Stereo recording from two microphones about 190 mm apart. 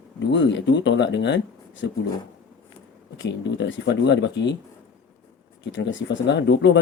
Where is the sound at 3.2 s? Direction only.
70° left (ahead or behind).